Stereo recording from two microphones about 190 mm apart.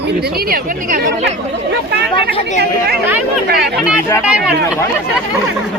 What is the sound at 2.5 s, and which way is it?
Speech, 60° right (ahead or behind).